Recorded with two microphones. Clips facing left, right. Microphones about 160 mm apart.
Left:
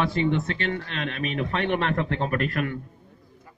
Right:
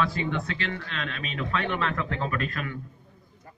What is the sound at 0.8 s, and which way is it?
A man's voice, 50° left (ahead or behind).